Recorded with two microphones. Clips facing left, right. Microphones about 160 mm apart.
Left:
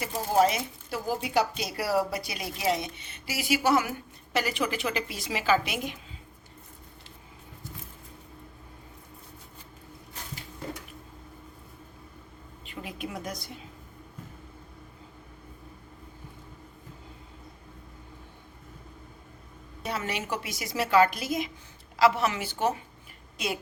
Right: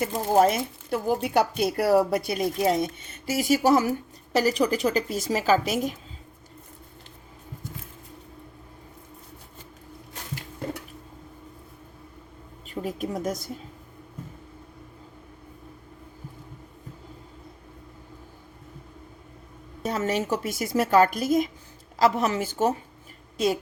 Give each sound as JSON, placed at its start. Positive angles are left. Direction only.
{"t": 0.0, "sound": "speech", "side_deg": -50}
{"t": 12.6, "sound": "a woman's voice", "side_deg": -40}
{"t": 19.8, "sound": "speech", "side_deg": -40}